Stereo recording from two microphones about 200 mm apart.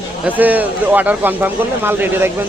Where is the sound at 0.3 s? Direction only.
10° right (ahead or behind).